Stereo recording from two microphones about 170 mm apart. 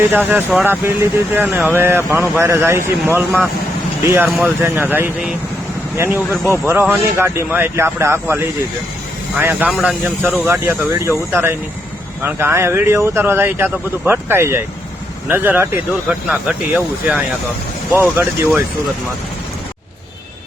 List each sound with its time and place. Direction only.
0.1 s speech: 10° right (ahead or behind)